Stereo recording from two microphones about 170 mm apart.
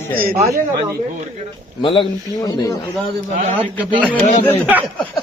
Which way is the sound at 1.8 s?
30° left (ahead or behind).